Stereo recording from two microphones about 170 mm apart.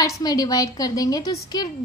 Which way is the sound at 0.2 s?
20° left (ahead or behind).